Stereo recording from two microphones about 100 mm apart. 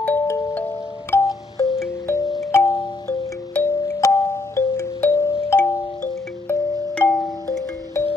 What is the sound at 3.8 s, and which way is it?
Music, 30° left (ahead or behind).